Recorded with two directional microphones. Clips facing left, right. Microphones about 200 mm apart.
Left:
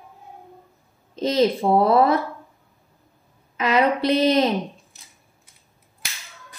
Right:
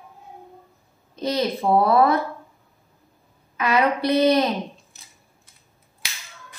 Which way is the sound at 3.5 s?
25° left (ahead or behind).